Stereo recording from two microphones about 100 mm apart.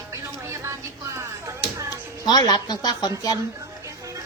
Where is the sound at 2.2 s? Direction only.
40° left (ahead or behind).